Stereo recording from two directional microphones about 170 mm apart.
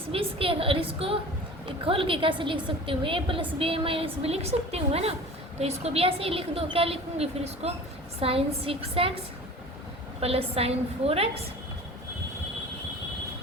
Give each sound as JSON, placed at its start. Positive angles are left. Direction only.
{"t": 0.1, "sound": "a woman's voice", "side_deg": -35}
{"t": 10.2, "sound": "a woman's voice", "side_deg": -35}